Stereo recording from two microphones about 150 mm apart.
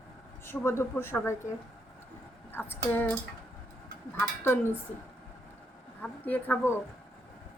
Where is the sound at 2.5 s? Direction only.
15° left (ahead or behind).